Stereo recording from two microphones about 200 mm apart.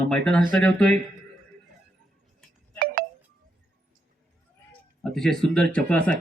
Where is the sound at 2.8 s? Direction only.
50° right (ahead or behind).